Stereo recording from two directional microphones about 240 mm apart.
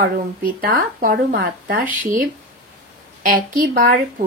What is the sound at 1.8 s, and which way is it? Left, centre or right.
Speech, centre.